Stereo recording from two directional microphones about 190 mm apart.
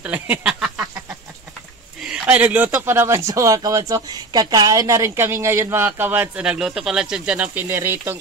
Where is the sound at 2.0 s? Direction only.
5° right (ahead or behind).